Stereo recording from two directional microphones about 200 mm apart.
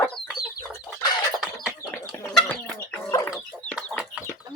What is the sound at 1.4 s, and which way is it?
Bird, centre (ahead or behind).